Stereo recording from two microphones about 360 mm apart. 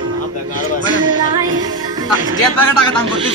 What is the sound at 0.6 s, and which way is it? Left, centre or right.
Music, right.